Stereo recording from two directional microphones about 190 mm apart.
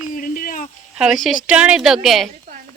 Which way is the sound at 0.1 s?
45° left (ahead or behind).